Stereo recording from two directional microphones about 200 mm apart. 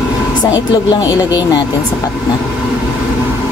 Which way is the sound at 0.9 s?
20° left (ahead or behind).